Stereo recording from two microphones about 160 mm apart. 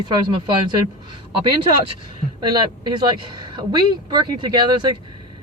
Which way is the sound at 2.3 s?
25° right (ahead or behind).